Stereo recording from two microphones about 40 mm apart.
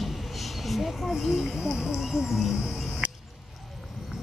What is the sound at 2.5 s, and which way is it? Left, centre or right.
Cricket, right.